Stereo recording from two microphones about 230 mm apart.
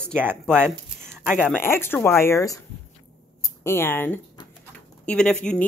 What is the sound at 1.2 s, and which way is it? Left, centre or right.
Speech, centre.